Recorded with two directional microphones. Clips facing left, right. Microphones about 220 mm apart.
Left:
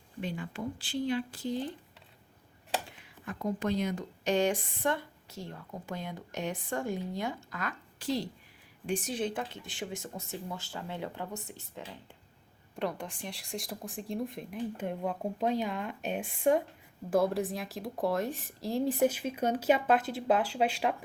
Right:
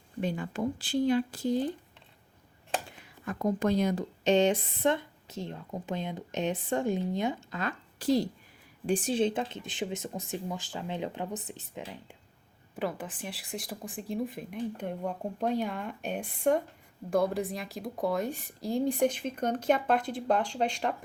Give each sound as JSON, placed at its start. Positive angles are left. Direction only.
{"t": 0.2, "sound": "speech", "side_deg": -45}
{"t": 3.2, "sound": "speech", "side_deg": -45}
{"t": 4.2, "sound": "a woman's voice", "side_deg": -25}
{"t": 8.9, "sound": "a woman's voice", "side_deg": -30}
{"t": 12.7, "sound": "speech", "side_deg": -5}